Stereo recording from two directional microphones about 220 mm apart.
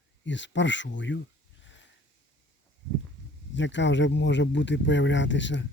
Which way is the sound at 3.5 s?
55° left (ahead or behind).